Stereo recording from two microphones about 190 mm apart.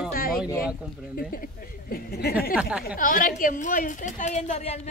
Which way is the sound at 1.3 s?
50° left (ahead or behind).